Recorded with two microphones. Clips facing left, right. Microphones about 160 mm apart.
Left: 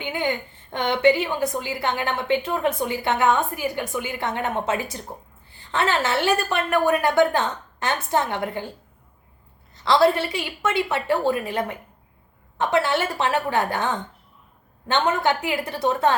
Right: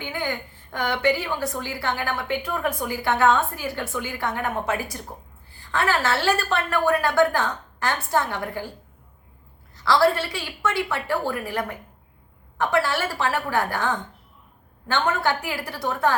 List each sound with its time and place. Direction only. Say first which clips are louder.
0.0 s a woman's voice: left 3 dB; 20° left (ahead or behind)
9.7 s a woman's voice: left 2 dB; 20° left (ahead or behind)